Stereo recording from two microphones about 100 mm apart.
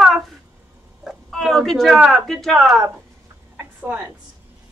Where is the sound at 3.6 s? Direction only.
20° right (ahead or behind).